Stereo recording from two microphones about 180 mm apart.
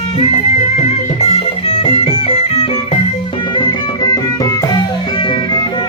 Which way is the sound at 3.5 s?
25° left (ahead or behind).